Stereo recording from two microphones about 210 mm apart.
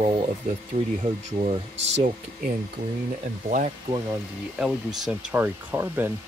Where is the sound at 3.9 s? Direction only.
25° right (ahead or behind).